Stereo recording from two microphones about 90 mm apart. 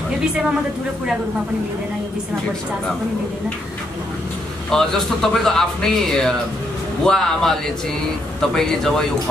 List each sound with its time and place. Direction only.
4.6 s speech: 5° left (ahead or behind)